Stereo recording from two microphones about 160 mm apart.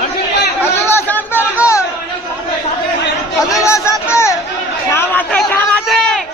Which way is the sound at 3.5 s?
20° left (ahead or behind).